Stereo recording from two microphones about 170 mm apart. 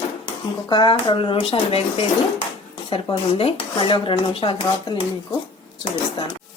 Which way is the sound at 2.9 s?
35° left (ahead or behind).